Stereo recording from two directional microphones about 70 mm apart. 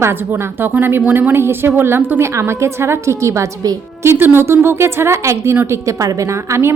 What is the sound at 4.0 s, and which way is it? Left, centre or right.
A woman's voice, right.